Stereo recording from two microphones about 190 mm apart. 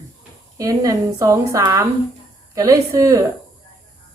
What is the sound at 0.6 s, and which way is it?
Speech, 20° right (ahead or behind).